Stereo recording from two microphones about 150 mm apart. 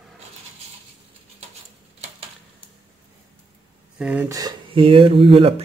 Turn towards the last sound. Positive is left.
turn(degrees=-40)  # may be behind; listen again after turning